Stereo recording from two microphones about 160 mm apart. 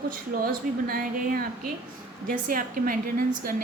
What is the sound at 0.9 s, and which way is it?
A woman's voice, 65° right (ahead or behind).